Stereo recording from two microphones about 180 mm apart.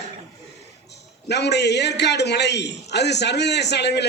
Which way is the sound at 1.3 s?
70° left (ahead or behind).